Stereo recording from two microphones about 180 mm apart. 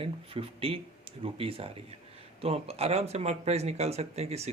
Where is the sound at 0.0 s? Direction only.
30° right (ahead or behind).